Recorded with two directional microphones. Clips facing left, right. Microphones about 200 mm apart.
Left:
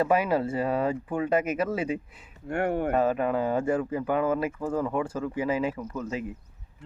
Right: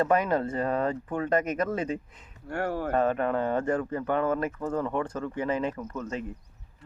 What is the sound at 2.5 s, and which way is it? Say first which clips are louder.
Speech: left 3 dB; 20° left (ahead or behind).